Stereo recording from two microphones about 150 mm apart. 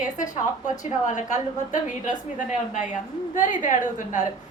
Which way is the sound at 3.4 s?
60° left (ahead or behind).